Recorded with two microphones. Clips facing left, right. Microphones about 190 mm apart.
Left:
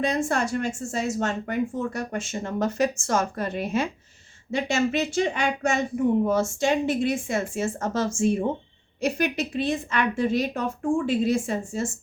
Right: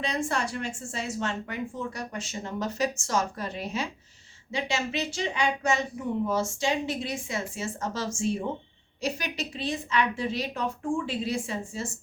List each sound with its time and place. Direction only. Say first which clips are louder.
0.0 s speech: left 5 dB; 45° left (ahead or behind)